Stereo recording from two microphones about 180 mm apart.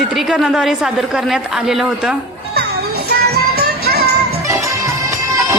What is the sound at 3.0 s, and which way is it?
Music, 60° right (ahead or behind).